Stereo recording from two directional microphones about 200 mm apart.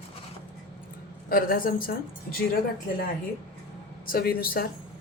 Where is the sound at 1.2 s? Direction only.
45° left (ahead or behind).